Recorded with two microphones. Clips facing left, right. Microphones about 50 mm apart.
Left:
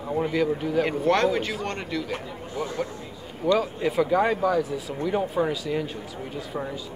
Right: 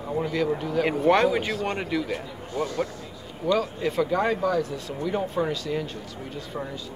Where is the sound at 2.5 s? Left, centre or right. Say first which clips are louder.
Right 2 dB; centre.